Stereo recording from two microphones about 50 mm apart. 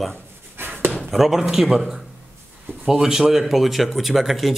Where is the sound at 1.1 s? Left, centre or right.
Centre.